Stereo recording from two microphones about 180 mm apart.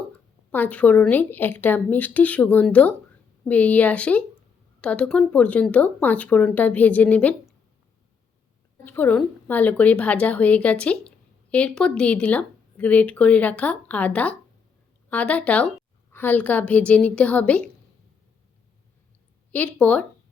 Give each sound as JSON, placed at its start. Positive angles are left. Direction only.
{"t": 0.5, "sound": "speech", "side_deg": 10}
{"t": 8.8, "sound": "speech", "side_deg": 10}
{"t": 19.5, "sound": "speech", "side_deg": 10}